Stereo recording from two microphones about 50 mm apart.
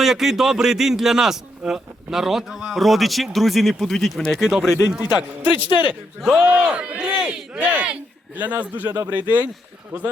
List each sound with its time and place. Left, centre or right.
0.0 s speech: centre
4.9 s a man's voice: right
6.1 s speech: centre
6.6 s a man's voice: right